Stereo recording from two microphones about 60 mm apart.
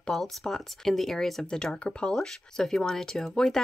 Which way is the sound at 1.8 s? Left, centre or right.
Centre.